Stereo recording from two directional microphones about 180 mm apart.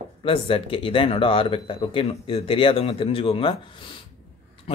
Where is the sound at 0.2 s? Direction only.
30° left (ahead or behind).